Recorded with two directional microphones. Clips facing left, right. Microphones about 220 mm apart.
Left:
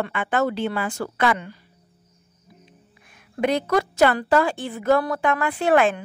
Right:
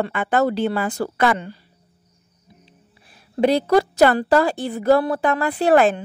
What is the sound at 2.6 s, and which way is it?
A woman's voice, 35° right (ahead or behind).